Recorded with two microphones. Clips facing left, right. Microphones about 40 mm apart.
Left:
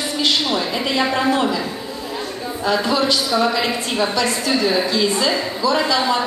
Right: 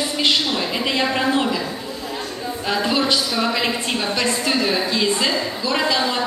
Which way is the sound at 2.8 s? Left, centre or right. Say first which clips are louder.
Left 1 dB; right.